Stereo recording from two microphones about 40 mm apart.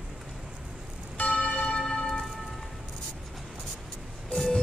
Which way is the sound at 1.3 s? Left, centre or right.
Left.